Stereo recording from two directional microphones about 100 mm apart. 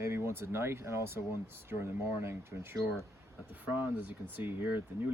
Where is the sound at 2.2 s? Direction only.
25° right (ahead or behind).